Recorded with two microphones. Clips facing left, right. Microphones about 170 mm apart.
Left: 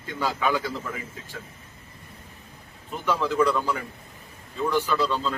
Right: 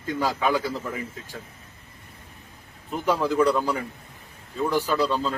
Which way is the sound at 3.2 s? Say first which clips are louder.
Right 1 dB; 35° right (ahead or behind).